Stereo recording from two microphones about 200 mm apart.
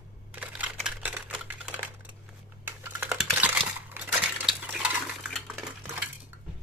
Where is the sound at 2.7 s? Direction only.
10° right (ahead or behind).